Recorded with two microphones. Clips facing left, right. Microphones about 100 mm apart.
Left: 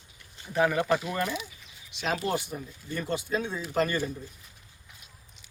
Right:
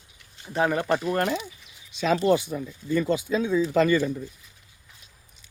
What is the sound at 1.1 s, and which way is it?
Speech, 65° right (ahead or behind).